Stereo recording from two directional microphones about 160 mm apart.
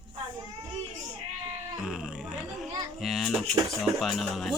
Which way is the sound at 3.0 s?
Centre (ahead or behind).